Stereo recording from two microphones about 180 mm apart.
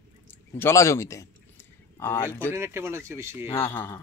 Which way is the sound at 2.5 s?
15° right (ahead or behind).